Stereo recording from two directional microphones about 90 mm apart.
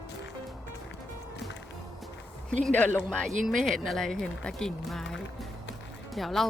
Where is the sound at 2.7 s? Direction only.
20° left (ahead or behind).